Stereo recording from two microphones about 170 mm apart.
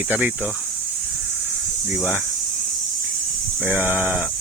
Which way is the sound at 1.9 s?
10° right (ahead or behind).